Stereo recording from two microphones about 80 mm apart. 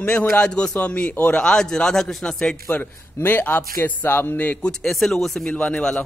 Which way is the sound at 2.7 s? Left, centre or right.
Left.